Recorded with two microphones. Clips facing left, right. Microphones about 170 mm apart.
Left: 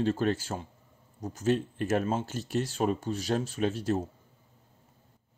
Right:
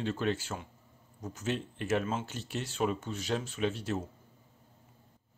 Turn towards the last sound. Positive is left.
turn(degrees=40)  # may be behind; listen again after turning